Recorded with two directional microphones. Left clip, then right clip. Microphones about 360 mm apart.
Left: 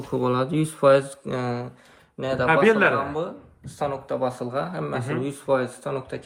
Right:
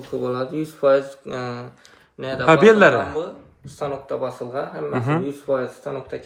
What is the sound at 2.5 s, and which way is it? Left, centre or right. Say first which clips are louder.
Speech: right 7 dB; centre.